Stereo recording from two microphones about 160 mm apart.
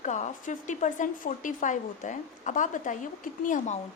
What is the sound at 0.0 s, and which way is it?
A woman's voice, 50° left (ahead or behind).